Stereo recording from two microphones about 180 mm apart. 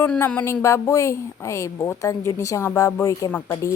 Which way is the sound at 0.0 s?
10° left (ahead or behind).